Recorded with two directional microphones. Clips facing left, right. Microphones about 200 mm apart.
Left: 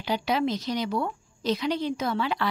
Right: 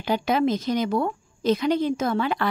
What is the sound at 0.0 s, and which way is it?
A woman's voice, 50° right (ahead or behind).